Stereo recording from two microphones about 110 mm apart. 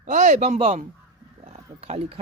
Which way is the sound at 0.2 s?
90° right.